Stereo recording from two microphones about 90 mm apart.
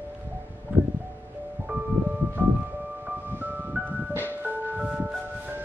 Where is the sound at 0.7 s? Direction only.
20° right (ahead or behind).